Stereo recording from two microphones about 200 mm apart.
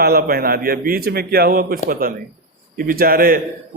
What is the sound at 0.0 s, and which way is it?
A man's voice, 50° right (ahead or behind).